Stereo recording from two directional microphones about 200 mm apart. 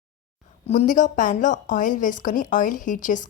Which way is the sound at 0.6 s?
35° left (ahead or behind).